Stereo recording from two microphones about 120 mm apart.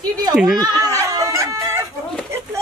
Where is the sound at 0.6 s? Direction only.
30° right (ahead or behind).